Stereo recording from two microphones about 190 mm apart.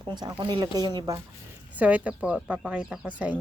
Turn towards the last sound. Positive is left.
turn(degrees=-5)  # may be behind; listen again after turning